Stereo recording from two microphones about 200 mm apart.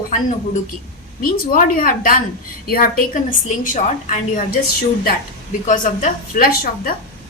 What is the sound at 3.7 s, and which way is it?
Speech, 35° left (ahead or behind).